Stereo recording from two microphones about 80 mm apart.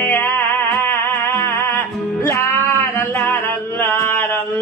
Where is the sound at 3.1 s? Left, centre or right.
Left.